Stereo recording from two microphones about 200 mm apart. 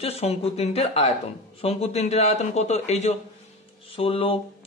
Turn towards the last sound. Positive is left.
turn(degrees=30)  # may be behind; listen again after turning